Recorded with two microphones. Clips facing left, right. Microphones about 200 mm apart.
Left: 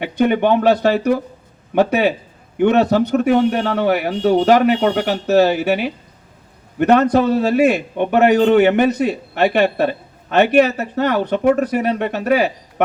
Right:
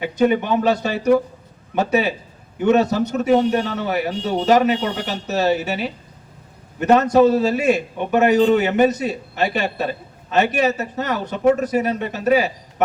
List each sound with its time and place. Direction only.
0.0 s a man's voice: 60° left (ahead or behind)